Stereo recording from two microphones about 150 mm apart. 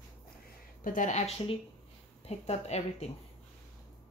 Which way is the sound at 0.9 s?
60° left (ahead or behind).